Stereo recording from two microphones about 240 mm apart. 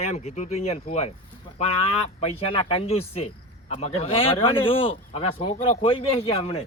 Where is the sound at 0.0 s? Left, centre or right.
Left.